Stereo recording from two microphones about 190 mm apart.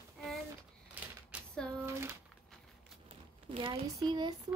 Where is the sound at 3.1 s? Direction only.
30° right (ahead or behind).